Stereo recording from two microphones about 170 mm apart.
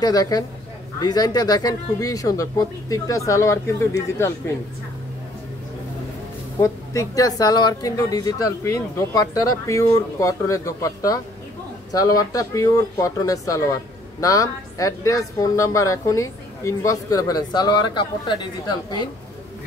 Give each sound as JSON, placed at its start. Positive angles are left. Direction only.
{"t": 0.0, "sound": "speech", "side_deg": 20}
{"t": 6.6, "sound": "speech", "side_deg": 20}